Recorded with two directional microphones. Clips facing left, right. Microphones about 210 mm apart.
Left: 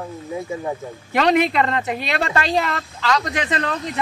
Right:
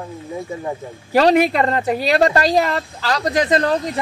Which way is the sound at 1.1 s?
35° right (ahead or behind).